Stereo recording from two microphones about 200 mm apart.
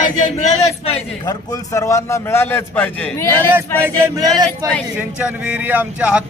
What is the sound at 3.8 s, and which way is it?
Speech, 15° right (ahead or behind).